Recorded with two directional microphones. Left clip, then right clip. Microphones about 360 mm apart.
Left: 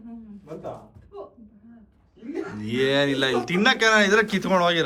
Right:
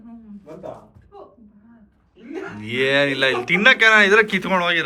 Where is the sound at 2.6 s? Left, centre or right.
Centre.